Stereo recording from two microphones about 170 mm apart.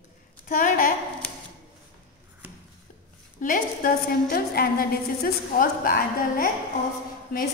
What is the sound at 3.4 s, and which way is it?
A woman's voice, 50° left (ahead or behind).